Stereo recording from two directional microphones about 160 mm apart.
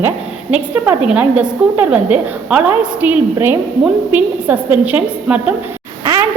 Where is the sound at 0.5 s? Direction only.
10° right (ahead or behind).